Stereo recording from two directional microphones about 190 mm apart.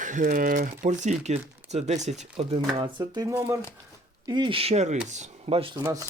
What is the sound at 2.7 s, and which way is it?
Speech, 20° right (ahead or behind).